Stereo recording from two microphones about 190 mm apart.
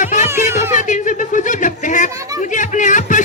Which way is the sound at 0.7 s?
40° left (ahead or behind).